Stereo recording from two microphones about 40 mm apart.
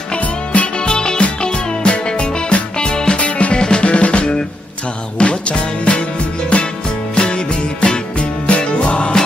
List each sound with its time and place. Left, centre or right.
0.2 s music: left
0.8 s music: left
3.2 s music: left
7.2 s music: left